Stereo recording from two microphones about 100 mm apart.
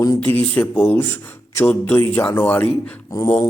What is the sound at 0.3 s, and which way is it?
Speech, 15° left (ahead or behind).